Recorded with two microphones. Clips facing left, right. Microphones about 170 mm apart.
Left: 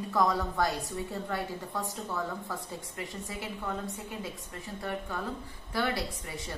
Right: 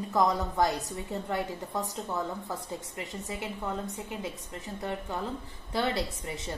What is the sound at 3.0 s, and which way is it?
A woman's voice, 20° right (ahead or behind).